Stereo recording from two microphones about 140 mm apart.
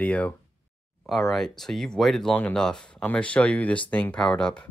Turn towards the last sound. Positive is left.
turn(degrees=5)  # may be behind; listen again after turning